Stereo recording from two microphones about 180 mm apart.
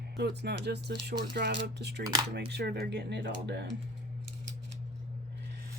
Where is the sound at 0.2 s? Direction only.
65° right (ahead or behind).